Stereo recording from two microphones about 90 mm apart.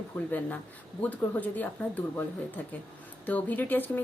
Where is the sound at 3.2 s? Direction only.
20° left (ahead or behind).